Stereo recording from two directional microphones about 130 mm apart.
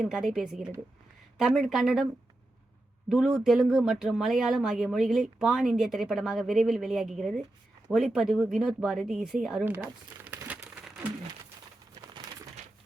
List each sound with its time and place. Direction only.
0.0 s speech: centre (ahead or behind)
3.1 s speech: 5° right (ahead or behind)
9.6 s speech: 15° right (ahead or behind)
10.2 s crumpling: 15° right (ahead or behind)
11.9 s a sound: 35° right (ahead or behind)